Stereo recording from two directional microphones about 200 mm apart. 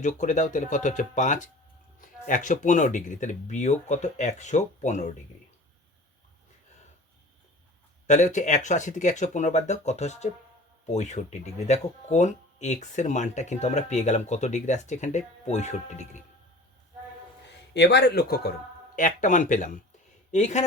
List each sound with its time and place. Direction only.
0.0 s speech: 40° left (ahead or behind)
8.0 s speech: 35° left (ahead or behind)
17.7 s a man's voice: 55° left (ahead or behind)
18.9 s speech: 40° left (ahead or behind)